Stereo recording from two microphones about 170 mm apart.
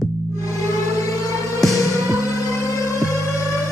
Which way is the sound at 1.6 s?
Centre (ahead or behind).